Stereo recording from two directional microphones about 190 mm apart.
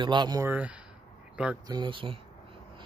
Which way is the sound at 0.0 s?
25° right (ahead or behind).